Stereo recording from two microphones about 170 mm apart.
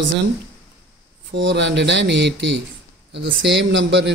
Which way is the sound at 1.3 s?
90° right.